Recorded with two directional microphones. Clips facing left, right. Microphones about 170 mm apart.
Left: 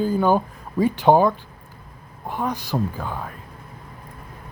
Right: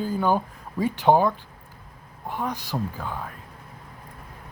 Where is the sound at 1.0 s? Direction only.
90° left.